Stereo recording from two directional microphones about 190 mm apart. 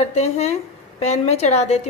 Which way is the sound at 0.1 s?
35° left (ahead or behind).